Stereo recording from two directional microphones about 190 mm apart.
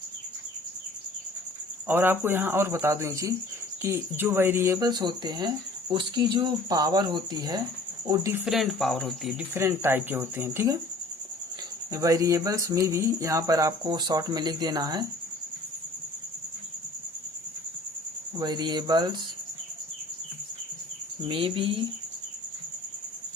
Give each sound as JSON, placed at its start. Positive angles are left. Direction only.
{"t": 1.9, "sound": "speech", "side_deg": -10}
{"t": 8.4, "sound": "speech", "side_deg": 0}
{"t": 9.6, "sound": "speech", "side_deg": -15}
{"t": 11.9, "sound": "speech", "side_deg": -20}
{"t": 18.3, "sound": "speech", "side_deg": -20}
{"t": 21.2, "sound": "speech", "side_deg": -30}